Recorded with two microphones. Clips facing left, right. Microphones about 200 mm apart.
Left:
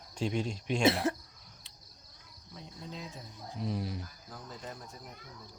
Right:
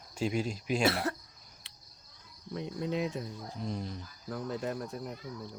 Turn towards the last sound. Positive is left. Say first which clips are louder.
# right 10 dB
turn(degrees=-65)  # may be behind; listen again after turning